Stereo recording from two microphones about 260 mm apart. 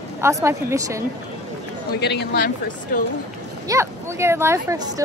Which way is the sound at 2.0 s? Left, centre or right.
Left.